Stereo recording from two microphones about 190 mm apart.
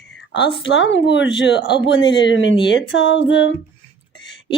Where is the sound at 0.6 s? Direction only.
80° left.